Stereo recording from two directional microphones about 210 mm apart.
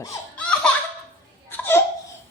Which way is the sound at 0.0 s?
10° left (ahead or behind).